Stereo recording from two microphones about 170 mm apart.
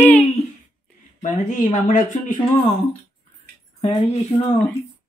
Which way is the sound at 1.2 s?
50° left (ahead or behind).